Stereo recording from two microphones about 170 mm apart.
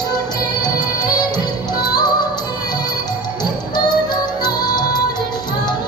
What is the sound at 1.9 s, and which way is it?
Music, 25° left (ahead or behind).